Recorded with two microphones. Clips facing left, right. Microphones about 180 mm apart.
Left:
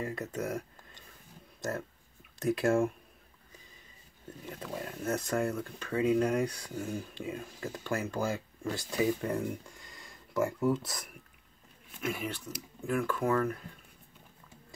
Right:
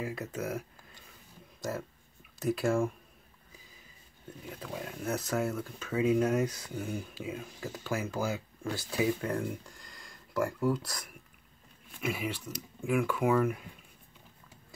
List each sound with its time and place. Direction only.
0.0 s speech: 5° right (ahead or behind)
2.3 s speech: centre (ahead or behind)
4.5 s speech: centre (ahead or behind)